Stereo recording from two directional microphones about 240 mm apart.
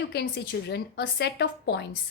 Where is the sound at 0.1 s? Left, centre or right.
Left.